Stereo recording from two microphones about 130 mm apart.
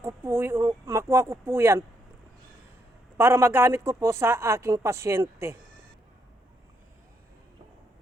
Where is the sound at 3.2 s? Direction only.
20° right (ahead or behind).